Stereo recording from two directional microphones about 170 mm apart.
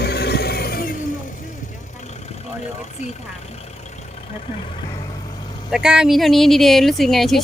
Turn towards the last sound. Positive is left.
turn(degrees=0)  # may be behind; listen again after turning